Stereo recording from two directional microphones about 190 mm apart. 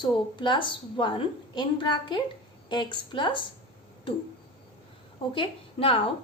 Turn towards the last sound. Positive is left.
turn(degrees=30)  # may be behind; listen again after turning